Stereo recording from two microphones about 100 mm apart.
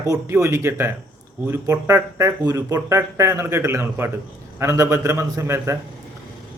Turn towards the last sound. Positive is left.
turn(degrees=-30)  # may be behind; listen again after turning